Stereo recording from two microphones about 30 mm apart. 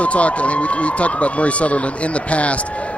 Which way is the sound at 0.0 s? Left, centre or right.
Left.